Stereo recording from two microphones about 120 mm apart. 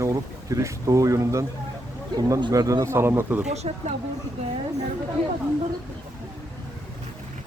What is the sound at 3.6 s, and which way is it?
Speech, 55° right (ahead or behind).